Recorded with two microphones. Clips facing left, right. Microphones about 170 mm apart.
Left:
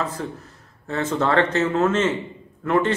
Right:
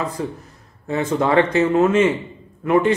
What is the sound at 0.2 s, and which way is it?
A man's voice, 10° right (ahead or behind).